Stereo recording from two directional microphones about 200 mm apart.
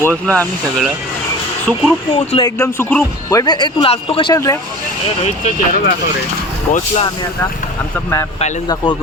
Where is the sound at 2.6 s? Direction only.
10° left (ahead or behind).